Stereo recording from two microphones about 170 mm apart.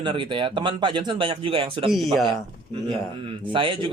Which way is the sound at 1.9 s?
Centre (ahead or behind).